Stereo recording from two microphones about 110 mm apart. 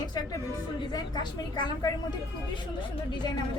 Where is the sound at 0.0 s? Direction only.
40° left (ahead or behind).